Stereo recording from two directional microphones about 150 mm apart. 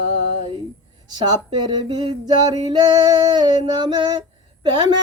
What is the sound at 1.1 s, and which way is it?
Female singing, 30° right (ahead or behind).